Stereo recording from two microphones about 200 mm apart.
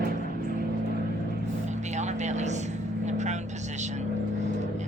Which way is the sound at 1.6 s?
35° right (ahead or behind).